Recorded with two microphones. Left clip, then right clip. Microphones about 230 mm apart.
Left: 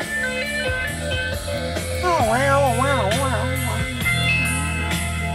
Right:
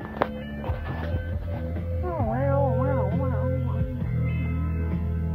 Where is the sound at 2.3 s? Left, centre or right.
Left.